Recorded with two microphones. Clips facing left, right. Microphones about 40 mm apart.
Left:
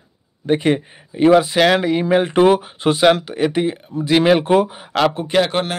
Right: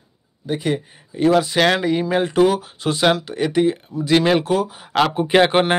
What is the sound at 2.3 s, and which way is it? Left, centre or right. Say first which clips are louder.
Speech: left 3 dB; left.